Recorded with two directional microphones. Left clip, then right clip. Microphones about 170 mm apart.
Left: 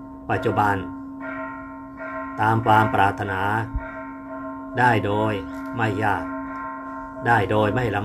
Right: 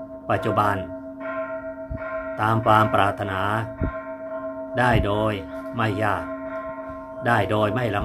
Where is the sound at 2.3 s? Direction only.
20° right (ahead or behind).